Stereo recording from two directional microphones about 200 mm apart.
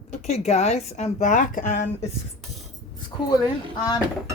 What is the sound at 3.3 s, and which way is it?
Speech, 20° left (ahead or behind).